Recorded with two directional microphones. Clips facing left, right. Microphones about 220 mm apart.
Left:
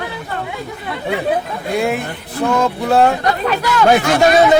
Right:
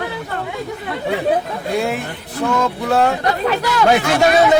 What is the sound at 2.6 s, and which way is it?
Speech, 30° left (ahead or behind).